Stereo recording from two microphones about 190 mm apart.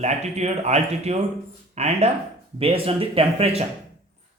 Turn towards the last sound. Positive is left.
turn(degrees=-30)  # may be behind; listen again after turning